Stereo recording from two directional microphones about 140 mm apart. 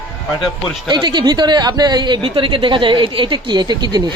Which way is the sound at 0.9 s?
30° right (ahead or behind).